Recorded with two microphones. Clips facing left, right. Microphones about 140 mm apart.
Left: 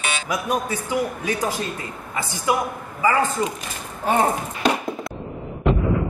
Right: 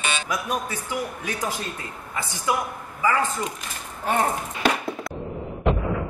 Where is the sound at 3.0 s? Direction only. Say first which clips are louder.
Left 3 dB; 15° left (ahead or behind).